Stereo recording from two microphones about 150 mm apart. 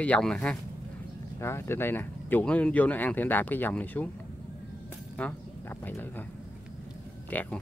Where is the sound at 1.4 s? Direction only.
15° left (ahead or behind).